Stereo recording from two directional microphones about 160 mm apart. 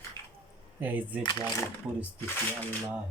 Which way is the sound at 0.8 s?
10° right (ahead or behind).